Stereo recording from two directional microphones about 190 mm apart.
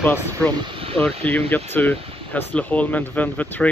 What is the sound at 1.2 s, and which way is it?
Speech, 10° left (ahead or behind).